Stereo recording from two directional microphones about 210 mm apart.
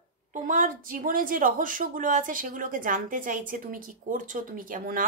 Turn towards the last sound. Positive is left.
turn(degrees=-40)  # may be behind; listen again after turning